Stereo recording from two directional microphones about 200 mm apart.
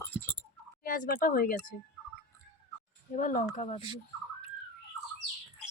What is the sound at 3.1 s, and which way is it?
Speech, 40° left (ahead or behind).